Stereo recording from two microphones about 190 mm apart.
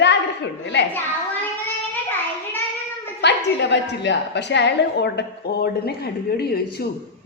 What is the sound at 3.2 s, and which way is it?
A woman's voice, 65° left (ahead or behind).